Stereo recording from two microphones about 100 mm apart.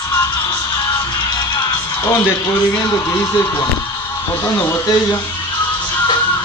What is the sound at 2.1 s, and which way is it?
Speech, 25° left (ahead or behind).